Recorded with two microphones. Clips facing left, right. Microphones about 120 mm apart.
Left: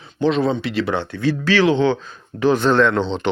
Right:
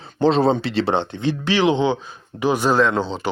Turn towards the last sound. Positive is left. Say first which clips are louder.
# left 2 dB
turn(degrees=-5)  # may be behind; listen again after turning